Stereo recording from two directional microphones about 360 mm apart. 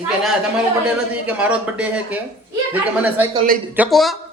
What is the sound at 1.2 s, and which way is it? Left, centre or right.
A man's voice, centre.